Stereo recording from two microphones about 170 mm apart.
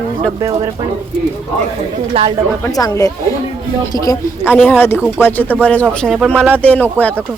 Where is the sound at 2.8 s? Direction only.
20° left (ahead or behind).